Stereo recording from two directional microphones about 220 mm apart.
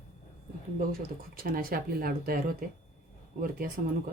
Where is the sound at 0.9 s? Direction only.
40° right (ahead or behind).